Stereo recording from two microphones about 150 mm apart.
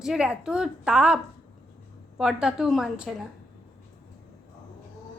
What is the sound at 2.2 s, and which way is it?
Speech, 5° right (ahead or behind).